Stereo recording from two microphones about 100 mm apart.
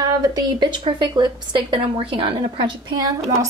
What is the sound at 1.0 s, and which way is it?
A woman's voice, 50° right (ahead or behind).